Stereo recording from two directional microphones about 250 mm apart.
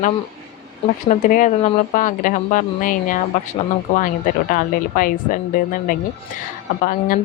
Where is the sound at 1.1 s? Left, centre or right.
Left.